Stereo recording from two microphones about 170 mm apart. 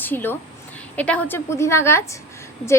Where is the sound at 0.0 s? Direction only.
10° left (ahead or behind).